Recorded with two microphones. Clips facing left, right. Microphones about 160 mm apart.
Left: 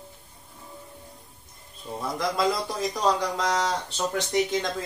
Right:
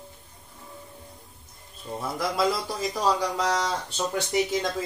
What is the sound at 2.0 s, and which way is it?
Speech, 5° right (ahead or behind).